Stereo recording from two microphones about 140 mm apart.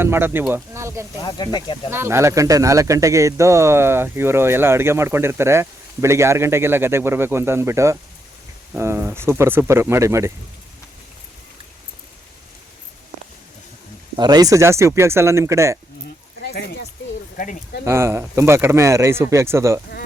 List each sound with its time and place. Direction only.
0.0 s speech: 15° right (ahead or behind)
1.2 s speech: 30° left (ahead or behind)
1.9 s speech: 20° right (ahead or behind)
14.2 s speech: 30° right (ahead or behind)
17.3 s speech: 75° left (ahead or behind)
17.8 s speech: 20° right (ahead or behind)